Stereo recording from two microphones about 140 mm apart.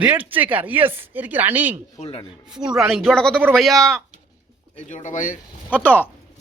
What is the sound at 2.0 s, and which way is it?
Speech, 45° left (ahead or behind).